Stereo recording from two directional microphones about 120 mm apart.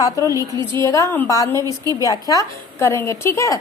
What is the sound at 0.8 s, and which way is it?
A woman's voice, 25° left (ahead or behind).